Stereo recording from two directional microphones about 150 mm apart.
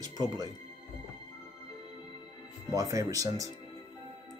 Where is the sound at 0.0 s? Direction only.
25° right (ahead or behind).